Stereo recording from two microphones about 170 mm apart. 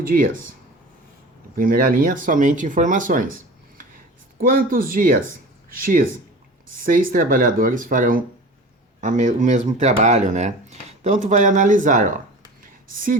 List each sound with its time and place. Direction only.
0.0 s speech: 55° right (ahead or behind)
1.5 s speech: 55° right (ahead or behind)
4.4 s speech: 55° right (ahead or behind)